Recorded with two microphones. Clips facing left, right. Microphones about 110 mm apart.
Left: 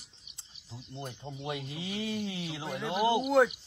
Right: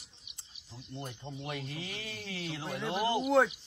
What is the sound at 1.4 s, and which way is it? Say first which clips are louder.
Speech: left 3 dB; 20° left (ahead or behind).